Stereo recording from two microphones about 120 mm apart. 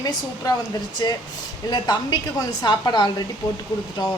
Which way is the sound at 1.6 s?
35° left (ahead or behind).